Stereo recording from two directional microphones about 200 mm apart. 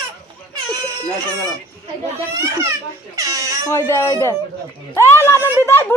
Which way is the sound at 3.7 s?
15° left (ahead or behind).